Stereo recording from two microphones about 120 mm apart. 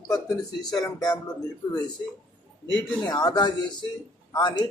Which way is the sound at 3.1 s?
35° left (ahead or behind).